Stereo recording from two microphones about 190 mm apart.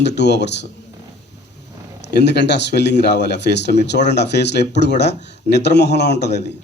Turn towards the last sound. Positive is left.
turn(degrees=65)  # may be behind; listen again after turning